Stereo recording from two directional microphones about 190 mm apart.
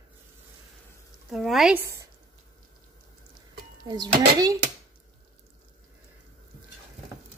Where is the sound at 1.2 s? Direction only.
Centre (ahead or behind).